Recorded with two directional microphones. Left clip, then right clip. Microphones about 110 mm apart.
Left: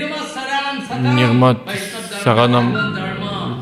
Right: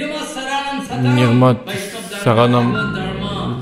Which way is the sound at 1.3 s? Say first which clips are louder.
Even; centre (ahead or behind).